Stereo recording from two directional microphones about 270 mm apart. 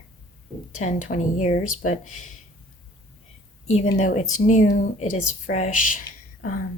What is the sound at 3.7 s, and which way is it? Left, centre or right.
Speech, left.